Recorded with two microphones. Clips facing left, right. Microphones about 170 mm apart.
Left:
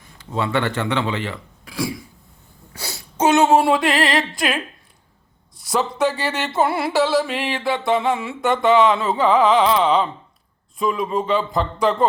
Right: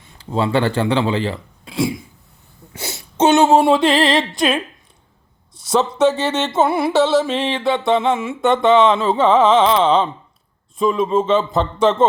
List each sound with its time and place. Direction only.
0.0 s speech: 30° right (ahead or behind)
2.7 s a sound: 25° right (ahead or behind)
5.6 s music: 20° right (ahead or behind)